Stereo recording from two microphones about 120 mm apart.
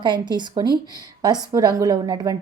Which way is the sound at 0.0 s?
40° right (ahead or behind).